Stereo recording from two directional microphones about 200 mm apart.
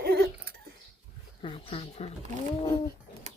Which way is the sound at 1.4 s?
30° left (ahead or behind).